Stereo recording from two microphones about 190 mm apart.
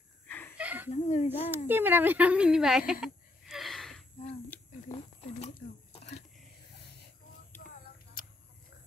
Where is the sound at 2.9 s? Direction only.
Centre (ahead or behind).